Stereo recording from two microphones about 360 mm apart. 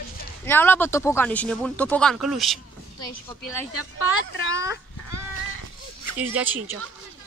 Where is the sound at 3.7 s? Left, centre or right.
Left.